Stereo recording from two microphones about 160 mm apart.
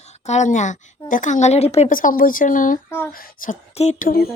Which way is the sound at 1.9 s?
60° left (ahead or behind).